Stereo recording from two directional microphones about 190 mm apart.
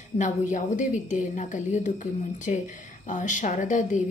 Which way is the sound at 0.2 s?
40° left (ahead or behind).